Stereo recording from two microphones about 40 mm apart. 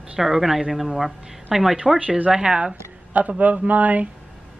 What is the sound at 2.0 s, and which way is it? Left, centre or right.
Speech, right.